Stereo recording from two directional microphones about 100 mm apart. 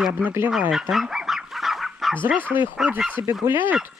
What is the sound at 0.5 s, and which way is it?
Goose, 5° right (ahead or behind).